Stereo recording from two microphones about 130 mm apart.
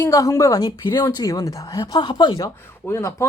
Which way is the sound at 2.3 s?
25° left (ahead or behind).